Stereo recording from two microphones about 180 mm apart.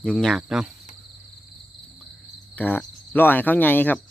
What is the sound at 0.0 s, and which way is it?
Speech, 5° left (ahead or behind).